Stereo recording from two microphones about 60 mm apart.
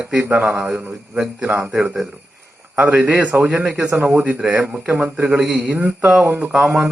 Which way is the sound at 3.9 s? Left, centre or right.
Right.